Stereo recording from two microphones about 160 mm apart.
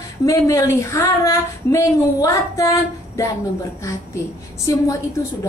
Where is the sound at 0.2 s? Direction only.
20° left (ahead or behind).